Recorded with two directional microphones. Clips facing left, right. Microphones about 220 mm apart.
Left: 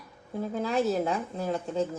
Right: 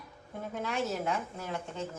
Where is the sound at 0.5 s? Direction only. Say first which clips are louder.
Left 7 dB; 35° left (ahead or behind).